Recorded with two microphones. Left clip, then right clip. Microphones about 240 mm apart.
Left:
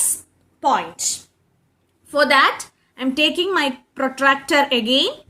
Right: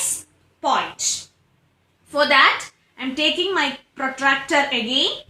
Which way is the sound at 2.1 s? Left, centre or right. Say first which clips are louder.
Even; left.